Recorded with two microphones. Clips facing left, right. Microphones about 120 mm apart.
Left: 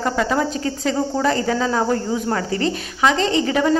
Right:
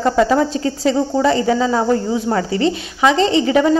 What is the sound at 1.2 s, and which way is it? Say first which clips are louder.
A woman's voice: right 5 dB; 20° right (ahead or behind).